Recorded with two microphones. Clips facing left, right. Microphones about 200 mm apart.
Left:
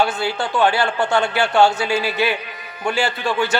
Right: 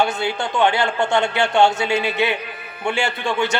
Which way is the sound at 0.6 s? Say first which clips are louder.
Even; 20° right (ahead or behind).